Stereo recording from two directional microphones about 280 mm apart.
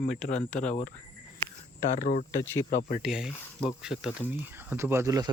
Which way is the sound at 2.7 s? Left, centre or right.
Left.